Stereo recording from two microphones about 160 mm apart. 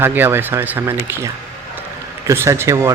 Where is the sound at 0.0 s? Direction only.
10° right (ahead or behind).